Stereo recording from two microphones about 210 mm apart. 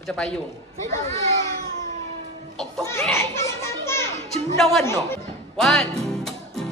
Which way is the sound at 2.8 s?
10° left (ahead or behind).